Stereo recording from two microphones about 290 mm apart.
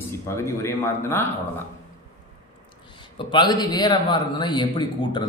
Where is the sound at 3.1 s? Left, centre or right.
Centre.